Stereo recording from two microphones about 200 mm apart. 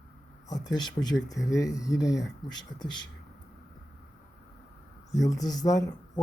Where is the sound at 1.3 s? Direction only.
15° left (ahead or behind).